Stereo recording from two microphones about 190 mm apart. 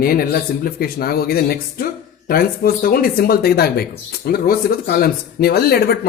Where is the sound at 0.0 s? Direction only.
50° left (ahead or behind).